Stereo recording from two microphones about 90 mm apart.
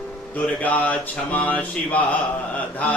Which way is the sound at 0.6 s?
15° left (ahead or behind).